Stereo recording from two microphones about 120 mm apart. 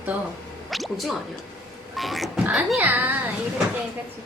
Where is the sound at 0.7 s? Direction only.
Centre (ahead or behind).